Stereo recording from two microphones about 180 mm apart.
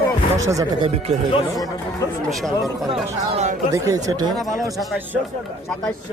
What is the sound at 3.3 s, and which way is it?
Speech, 40° right (ahead or behind).